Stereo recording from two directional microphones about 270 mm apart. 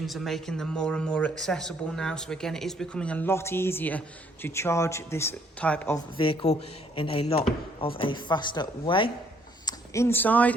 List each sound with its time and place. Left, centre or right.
0.0 s speech: centre
6.1 s a man's voice: centre